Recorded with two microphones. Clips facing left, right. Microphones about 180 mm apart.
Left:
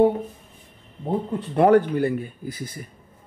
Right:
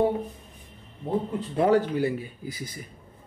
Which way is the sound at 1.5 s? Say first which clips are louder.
Left 5 dB; 70° left (ahead or behind).